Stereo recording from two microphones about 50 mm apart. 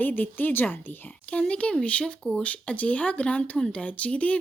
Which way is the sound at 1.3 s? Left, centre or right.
Left.